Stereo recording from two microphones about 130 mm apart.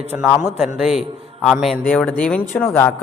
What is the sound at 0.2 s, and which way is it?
Speech, 10° right (ahead or behind).